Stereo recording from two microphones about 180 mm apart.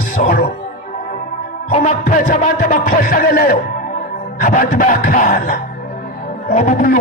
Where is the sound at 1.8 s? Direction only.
45° left (ahead or behind).